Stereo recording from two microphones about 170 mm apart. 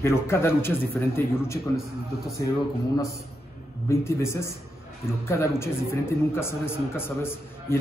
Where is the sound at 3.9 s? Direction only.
15° left (ahead or behind).